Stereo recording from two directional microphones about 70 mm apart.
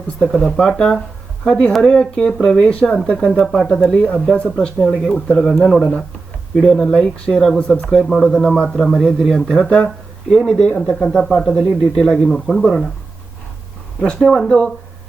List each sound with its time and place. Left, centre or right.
0.2 s a man's voice: centre
0.5 s a man's voice: centre
14.4 s a man's voice: centre